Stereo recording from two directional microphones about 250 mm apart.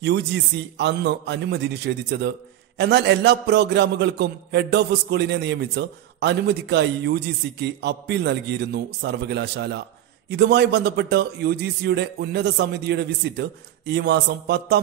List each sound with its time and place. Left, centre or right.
0.0 s a man's voice: right